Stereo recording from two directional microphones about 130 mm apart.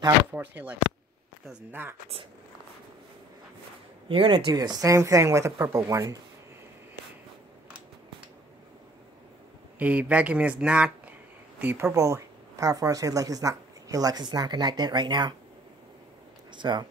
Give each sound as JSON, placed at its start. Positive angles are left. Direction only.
{"t": 0.3, "sound": "speech", "side_deg": -15}
{"t": 4.1, "sound": "speech", "side_deg": -40}
{"t": 9.8, "sound": "speech", "side_deg": -10}
{"t": 16.5, "sound": "speech", "side_deg": -35}